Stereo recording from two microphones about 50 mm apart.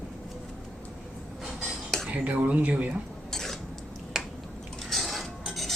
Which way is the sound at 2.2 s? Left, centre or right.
Right.